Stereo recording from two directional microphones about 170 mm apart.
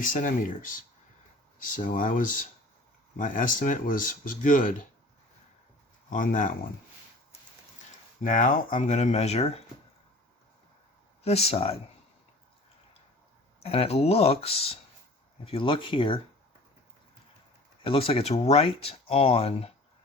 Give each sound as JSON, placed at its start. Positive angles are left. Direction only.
{"t": 0.0, "sound": "speech", "side_deg": 50}
{"t": 6.1, "sound": "speech", "side_deg": 50}
{"t": 8.2, "sound": "speech", "side_deg": 50}
{"t": 11.2, "sound": "speech", "side_deg": 40}
{"t": 13.6, "sound": "speech", "side_deg": 35}
{"t": 17.8, "sound": "speech", "side_deg": 35}